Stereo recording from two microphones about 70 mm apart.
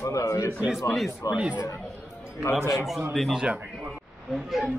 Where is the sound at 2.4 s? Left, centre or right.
Left.